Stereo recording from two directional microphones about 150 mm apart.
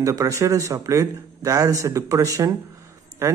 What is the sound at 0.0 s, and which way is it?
Speech, 20° right (ahead or behind).